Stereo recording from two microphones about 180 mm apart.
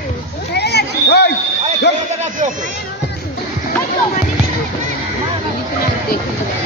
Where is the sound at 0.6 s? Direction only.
65° left (ahead or behind).